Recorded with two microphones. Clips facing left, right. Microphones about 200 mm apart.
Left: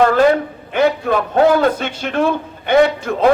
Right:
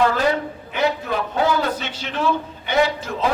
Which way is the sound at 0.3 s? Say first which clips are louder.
Left 6 dB; 50° left (ahead or behind).